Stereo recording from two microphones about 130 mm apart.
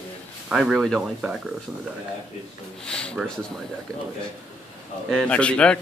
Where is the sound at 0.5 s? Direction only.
5° right (ahead or behind).